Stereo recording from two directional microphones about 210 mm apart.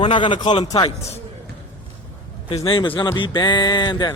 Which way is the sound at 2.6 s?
25° left (ahead or behind).